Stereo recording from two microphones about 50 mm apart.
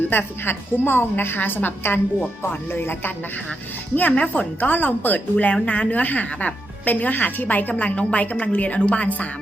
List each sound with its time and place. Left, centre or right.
0.1 s a woman's voice: left
4.1 s a woman's voice: left